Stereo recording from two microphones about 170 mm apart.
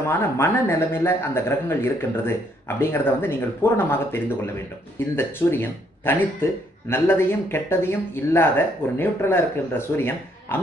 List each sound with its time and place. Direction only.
0.1 s speech: 15° left (ahead or behind)